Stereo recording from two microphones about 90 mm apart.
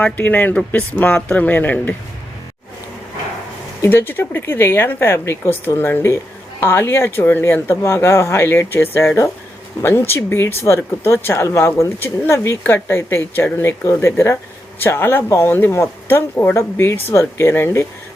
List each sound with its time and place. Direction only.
0.0 s speech: 20° left (ahead or behind)
3.8 s speech: 25° left (ahead or behind)